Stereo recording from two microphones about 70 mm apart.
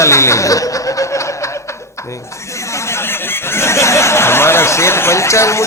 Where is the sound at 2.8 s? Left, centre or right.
Left.